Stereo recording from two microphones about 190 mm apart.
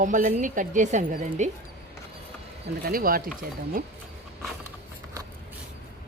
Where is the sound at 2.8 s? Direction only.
50° right (ahead or behind).